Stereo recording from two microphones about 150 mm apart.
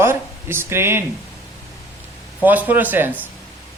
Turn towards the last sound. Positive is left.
turn(degrees=-15)  # may be behind; listen again after turning